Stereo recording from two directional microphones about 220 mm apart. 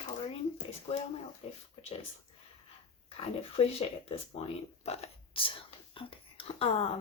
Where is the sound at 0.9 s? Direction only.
25° left (ahead or behind).